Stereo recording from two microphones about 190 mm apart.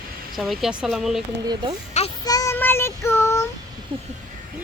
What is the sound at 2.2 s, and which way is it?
Child singing, 20° left (ahead or behind).